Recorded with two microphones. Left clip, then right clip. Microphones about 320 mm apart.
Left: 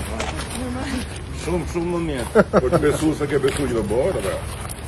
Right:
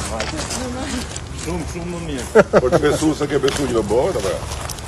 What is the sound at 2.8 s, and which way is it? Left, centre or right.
Speech, centre.